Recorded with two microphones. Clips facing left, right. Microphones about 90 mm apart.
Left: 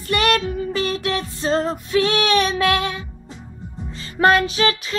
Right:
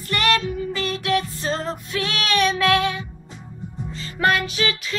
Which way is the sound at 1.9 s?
30° left (ahead or behind).